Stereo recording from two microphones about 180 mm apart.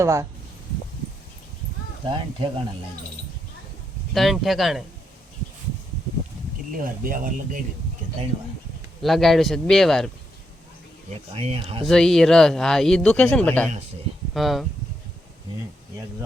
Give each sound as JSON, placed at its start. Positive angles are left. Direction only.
{"t": 0.0, "sound": "speech", "side_deg": -15}
{"t": 2.0, "sound": "speech", "side_deg": -25}
{"t": 4.1, "sound": "a man's voice", "side_deg": 0}
{"t": 6.7, "sound": "speech", "side_deg": -50}
{"t": 9.0, "sound": "a man's voice", "side_deg": 0}
{"t": 11.1, "sound": "speech", "side_deg": -35}
{"t": 11.9, "sound": "a man's voice", "side_deg": 0}